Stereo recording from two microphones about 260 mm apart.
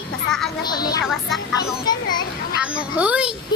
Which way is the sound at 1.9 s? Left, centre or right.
Centre.